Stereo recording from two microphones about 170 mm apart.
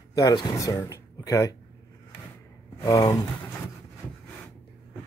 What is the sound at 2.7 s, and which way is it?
Speech, 20° left (ahead or behind).